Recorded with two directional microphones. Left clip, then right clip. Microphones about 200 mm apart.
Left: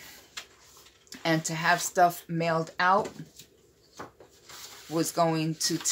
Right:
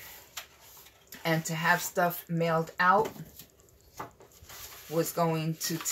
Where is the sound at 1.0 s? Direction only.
45° left (ahead or behind).